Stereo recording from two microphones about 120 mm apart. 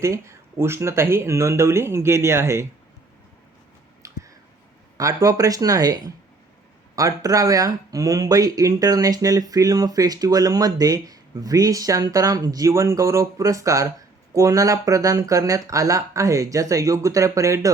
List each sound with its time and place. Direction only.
0.0 s speech: 25° right (ahead or behind)
4.0 s a sound: 25° right (ahead or behind)
4.9 s speech: 30° right (ahead or behind)